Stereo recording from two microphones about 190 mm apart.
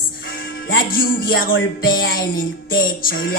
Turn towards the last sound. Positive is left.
turn(degrees=55)  # may be behind; listen again after turning